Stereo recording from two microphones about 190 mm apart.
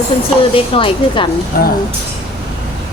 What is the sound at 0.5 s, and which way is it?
Speech, 25° left (ahead or behind).